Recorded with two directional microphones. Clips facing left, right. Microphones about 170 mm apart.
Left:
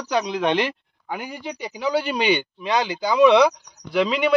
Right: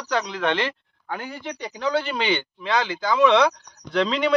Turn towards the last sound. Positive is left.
turn(degrees=5)  # may be behind; listen again after turning